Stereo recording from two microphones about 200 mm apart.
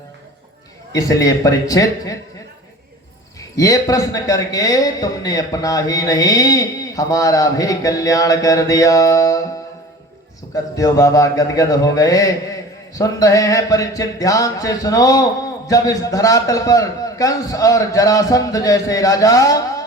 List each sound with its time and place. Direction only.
0.9 s music: 15° left (ahead or behind)
3.5 s music: 15° left (ahead or behind)
10.5 s music: 15° left (ahead or behind)